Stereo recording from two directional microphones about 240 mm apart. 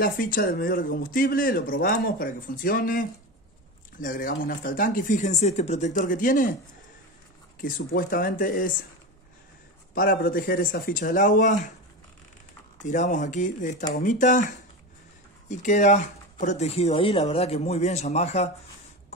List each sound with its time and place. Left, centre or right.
0.0 s speech: left
7.6 s speech: left
9.9 s speech: left
12.8 s speech: left